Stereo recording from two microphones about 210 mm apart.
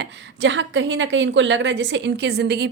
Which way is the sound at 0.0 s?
60° right (ahead or behind).